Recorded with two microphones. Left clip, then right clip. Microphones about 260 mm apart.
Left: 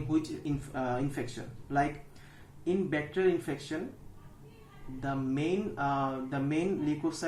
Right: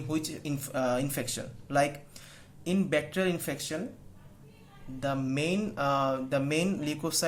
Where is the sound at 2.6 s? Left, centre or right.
Right.